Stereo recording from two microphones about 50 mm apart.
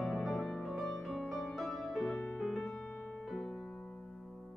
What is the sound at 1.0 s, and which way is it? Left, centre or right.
Music, centre.